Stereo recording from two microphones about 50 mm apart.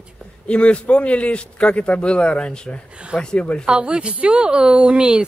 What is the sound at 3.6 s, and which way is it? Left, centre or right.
Speech, centre.